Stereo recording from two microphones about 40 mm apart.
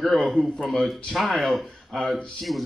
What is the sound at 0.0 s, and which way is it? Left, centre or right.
Speech, centre.